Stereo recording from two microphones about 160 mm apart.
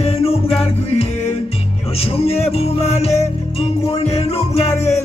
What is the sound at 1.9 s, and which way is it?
Music, 40° left (ahead or behind).